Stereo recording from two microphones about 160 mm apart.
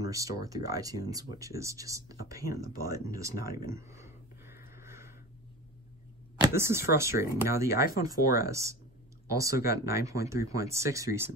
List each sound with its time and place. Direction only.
0.0 s speech: 20° right (ahead or behind)
3.7 s a sound: 15° right (ahead or behind)
6.4 s speech: 15° right (ahead or behind)